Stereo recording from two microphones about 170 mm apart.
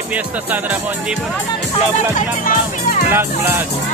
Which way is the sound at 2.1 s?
50° left (ahead or behind).